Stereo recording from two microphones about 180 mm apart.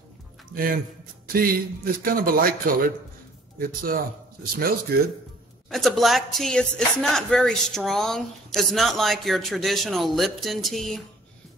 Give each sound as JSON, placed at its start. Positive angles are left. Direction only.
{"t": 1.3, "sound": "speech", "side_deg": -55}
{"t": 5.7, "sound": "speech", "side_deg": 0}